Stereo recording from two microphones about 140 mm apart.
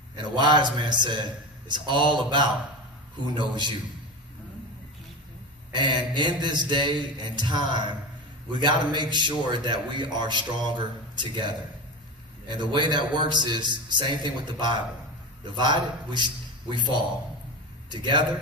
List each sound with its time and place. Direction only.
0.2 s a man's voice: 35° right (ahead or behind)
5.7 s a man's voice: 35° right (ahead or behind)